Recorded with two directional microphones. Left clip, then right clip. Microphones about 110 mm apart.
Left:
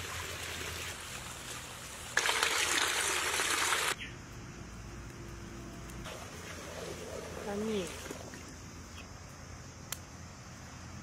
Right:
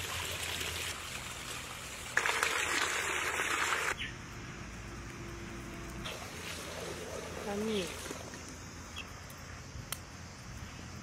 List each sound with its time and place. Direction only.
0.0 s stream: centre (ahead or behind)
2.2 s a sound: 45° left (ahead or behind)
6.0 s boat: centre (ahead or behind)